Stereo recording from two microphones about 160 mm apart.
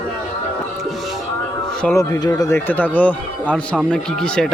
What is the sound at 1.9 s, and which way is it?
Speech, 20° left (ahead or behind).